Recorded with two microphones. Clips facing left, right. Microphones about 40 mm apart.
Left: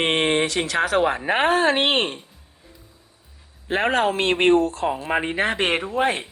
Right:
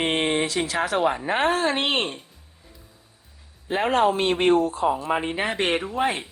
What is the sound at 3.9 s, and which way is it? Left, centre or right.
Speech, left.